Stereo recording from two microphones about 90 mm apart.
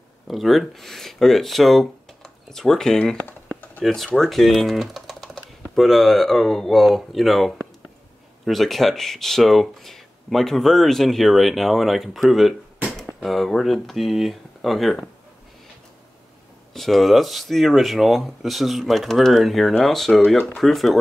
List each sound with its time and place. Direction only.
0.3 s speech: centre (ahead or behind)
3.3 s typing: 20° left (ahead or behind)
3.8 s speech: centre (ahead or behind)
16.7 s speech: centre (ahead or behind)